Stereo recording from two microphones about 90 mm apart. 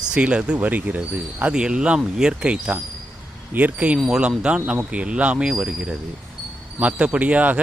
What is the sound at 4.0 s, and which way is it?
Speech, 5° right (ahead or behind).